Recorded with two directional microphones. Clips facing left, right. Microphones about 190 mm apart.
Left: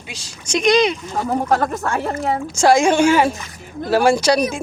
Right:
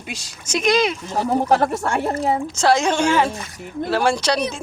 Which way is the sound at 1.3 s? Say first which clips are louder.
Right 1 dB; 25° right (ahead or behind).